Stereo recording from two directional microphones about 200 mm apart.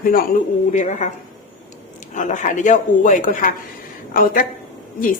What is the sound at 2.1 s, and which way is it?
A woman's voice, 40° left (ahead or behind).